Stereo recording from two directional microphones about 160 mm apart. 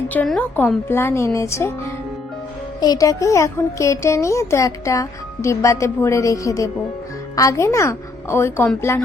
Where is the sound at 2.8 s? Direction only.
25° left (ahead or behind).